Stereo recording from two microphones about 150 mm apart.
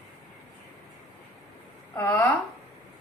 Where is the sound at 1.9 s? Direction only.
15° left (ahead or behind).